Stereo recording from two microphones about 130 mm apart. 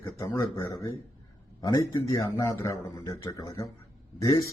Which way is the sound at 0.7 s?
30° left (ahead or behind).